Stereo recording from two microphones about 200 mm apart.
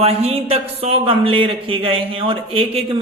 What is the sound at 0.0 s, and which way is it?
A man's voice, 30° right (ahead or behind).